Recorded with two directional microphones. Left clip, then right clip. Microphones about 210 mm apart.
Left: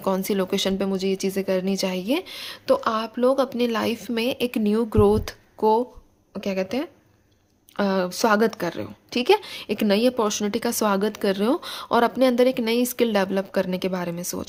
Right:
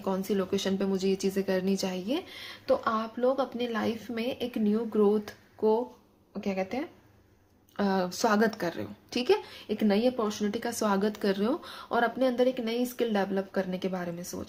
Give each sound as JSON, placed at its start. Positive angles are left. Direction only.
{"t": 0.0, "sound": "a woman's voice", "side_deg": 40}
{"t": 7.8, "sound": "a woman's voice", "side_deg": 35}